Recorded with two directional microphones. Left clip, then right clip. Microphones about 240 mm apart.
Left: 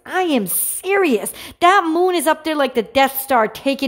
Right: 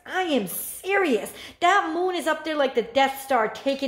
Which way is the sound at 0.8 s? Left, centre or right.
Left.